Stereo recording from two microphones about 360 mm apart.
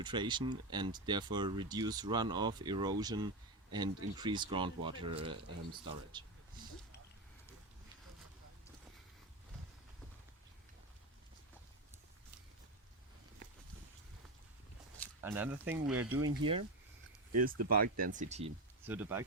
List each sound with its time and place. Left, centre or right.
0.0 s speech: centre
15.2 s speech: centre
18.9 s speech: centre